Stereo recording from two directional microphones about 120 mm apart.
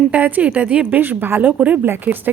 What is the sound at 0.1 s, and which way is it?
A woman's voice, 15° right (ahead or behind).